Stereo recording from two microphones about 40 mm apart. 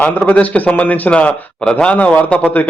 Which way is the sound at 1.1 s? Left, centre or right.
Left.